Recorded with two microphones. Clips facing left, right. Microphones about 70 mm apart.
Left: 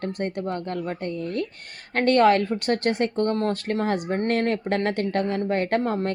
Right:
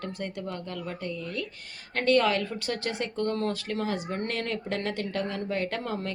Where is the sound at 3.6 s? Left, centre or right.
Left.